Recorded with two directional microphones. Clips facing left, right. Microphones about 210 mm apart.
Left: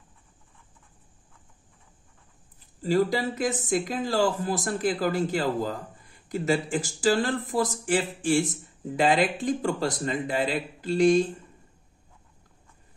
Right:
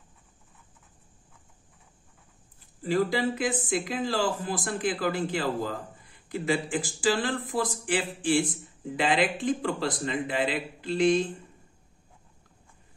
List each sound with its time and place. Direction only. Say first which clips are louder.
2.8 s speech: left 2 dB; 40° left (ahead or behind)